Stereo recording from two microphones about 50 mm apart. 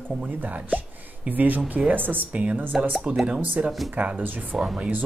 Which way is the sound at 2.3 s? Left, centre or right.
Right.